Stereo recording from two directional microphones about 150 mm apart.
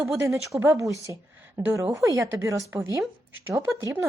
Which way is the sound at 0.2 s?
20° right (ahead or behind).